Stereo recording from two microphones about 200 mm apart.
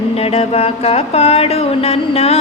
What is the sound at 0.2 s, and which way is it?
Music, 30° left (ahead or behind).